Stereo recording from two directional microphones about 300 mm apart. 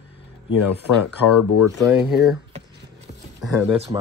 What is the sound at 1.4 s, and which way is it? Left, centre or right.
Speech, left.